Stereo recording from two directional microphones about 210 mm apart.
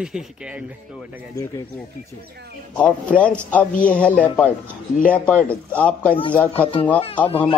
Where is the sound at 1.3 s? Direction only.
15° left (ahead or behind).